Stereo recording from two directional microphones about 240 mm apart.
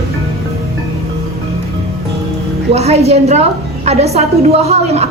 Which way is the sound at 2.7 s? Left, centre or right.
Right.